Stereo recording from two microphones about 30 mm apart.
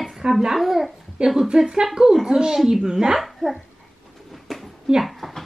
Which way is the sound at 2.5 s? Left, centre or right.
Centre.